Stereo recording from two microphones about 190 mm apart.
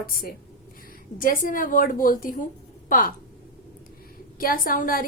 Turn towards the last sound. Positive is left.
turn(degrees=50)  # may be behind; listen again after turning